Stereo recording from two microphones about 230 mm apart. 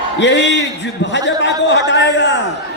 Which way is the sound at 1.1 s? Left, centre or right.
Left.